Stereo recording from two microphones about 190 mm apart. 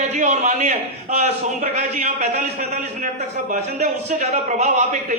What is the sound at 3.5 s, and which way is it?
A man's voice, 40° right (ahead or behind).